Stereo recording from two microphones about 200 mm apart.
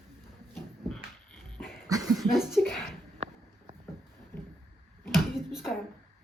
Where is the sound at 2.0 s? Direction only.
Centre (ahead or behind).